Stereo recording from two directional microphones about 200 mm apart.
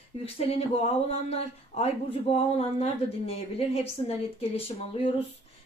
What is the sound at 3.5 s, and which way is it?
A woman's voice, 30° left (ahead or behind).